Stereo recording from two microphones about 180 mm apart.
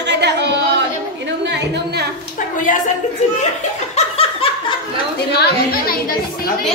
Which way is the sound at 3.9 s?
35° left (ahead or behind).